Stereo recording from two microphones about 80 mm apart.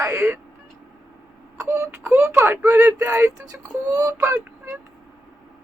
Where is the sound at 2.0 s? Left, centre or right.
Centre.